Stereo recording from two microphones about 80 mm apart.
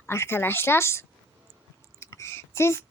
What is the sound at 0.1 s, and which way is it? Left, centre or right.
A woman's voice, left.